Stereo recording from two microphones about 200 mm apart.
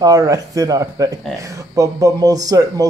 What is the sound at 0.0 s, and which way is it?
Speech, 15° right (ahead or behind).